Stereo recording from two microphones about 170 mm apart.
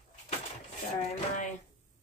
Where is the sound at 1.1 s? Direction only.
50° left (ahead or behind).